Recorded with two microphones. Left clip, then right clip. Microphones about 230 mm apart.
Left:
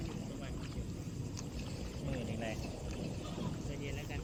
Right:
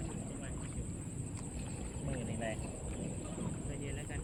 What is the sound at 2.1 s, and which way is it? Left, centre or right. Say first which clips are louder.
Vehicle: right 1 dB; centre.